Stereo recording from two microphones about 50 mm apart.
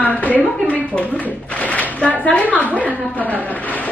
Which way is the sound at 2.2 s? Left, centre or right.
Left.